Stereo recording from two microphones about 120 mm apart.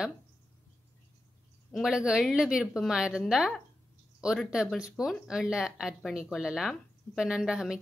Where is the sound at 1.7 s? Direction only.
5° right (ahead or behind).